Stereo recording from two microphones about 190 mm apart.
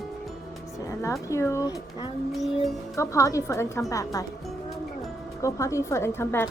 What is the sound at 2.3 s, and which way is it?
Music, centre (ahead or behind).